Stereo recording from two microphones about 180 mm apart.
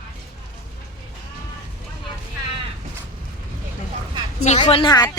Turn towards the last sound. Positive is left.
turn(degrees=25)  # may be behind; listen again after turning